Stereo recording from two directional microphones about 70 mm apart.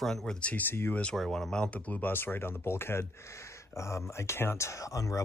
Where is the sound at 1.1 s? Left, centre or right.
Centre; by 5.2 s left.